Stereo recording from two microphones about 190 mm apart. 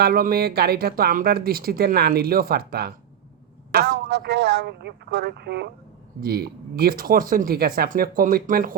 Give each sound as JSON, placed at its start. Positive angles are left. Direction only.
{"t": 0.0, "sound": "speech", "side_deg": -50}